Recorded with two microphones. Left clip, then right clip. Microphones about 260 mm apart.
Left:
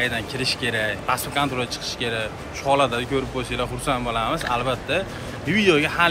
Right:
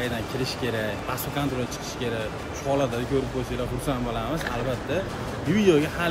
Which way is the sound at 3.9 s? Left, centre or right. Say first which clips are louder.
Left 7 dB; centre.